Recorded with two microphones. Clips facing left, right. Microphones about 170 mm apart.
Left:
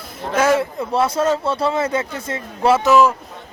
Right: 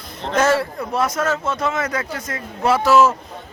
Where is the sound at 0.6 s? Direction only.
25° left (ahead or behind).